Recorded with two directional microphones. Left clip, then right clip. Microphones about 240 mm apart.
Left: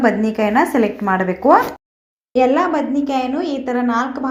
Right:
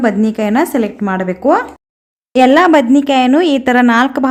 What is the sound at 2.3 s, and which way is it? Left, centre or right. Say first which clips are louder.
Speech: right 7 dB; right.